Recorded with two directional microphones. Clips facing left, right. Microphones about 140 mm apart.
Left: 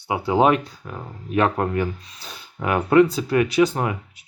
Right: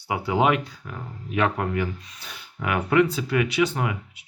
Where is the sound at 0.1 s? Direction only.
35° left (ahead or behind).